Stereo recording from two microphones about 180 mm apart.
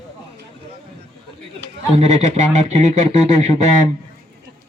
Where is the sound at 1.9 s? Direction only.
40° right (ahead or behind).